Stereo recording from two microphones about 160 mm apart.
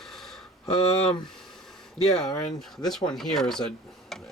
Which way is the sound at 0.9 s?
40° left (ahead or behind).